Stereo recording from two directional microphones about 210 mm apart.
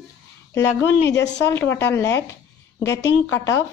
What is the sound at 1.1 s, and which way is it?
Speech, 55° left (ahead or behind).